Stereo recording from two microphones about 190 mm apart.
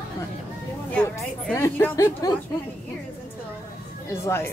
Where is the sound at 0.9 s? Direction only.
10° left (ahead or behind).